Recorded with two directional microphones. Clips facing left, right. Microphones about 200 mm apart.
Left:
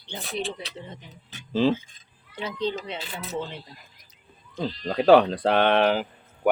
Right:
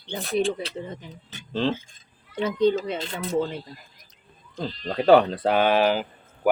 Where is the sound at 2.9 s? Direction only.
5° left (ahead or behind).